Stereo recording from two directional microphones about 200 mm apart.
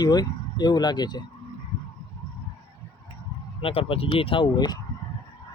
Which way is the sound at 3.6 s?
25° left (ahead or behind).